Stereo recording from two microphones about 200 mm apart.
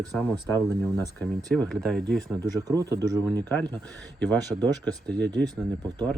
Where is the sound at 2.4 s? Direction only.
20° right (ahead or behind).